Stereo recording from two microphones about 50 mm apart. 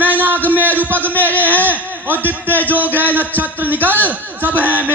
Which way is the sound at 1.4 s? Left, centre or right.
Right.